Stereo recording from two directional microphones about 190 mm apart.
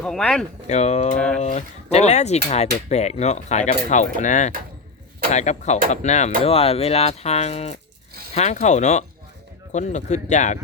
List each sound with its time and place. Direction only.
0.0 s speech: 5° left (ahead or behind)
0.7 s speech: 35° left (ahead or behind)